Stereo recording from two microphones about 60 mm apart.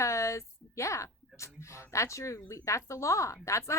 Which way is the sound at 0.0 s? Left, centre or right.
Left.